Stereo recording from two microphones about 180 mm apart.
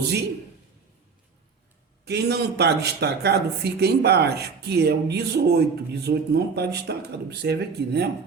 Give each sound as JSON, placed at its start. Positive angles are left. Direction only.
{"t": 2.0, "sound": "speech", "side_deg": -65}